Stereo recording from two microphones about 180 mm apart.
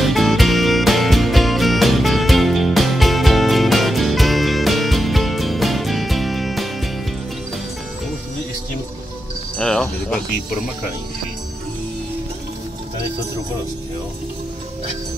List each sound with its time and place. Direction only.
0.0 s music: centre (ahead or behind)
9.6 s music: 5° left (ahead or behind)